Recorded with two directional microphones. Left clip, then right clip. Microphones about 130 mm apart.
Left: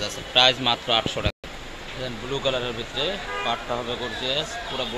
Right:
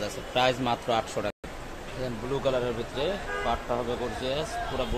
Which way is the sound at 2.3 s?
5° right (ahead or behind).